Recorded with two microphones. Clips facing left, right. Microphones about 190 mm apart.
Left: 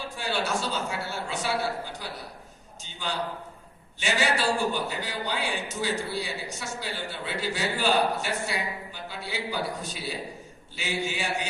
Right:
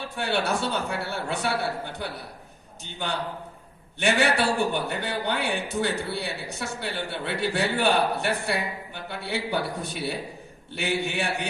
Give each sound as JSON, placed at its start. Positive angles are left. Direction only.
{"t": 0.0, "sound": "a man's voice", "side_deg": -60}